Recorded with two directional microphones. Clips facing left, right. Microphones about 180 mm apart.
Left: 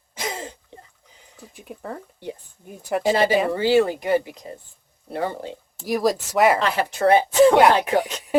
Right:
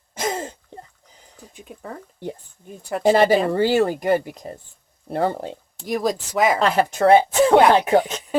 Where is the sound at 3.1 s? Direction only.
45° right (ahead or behind).